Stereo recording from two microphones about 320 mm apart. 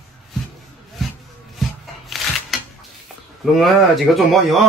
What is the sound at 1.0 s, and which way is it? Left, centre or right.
Rub, centre.